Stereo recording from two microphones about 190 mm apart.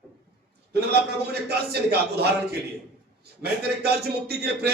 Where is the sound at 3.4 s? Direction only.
55° right (ahead or behind).